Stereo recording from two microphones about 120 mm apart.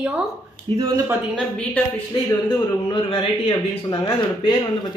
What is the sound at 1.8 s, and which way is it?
Speech, 15° left (ahead or behind).